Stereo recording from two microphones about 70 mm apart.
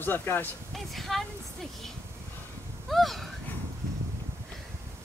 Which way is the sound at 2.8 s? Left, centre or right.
Centre.